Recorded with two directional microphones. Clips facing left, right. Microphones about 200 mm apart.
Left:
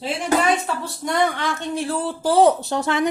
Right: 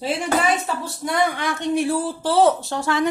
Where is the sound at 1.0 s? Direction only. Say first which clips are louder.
Left 1 dB; 10° right (ahead or behind).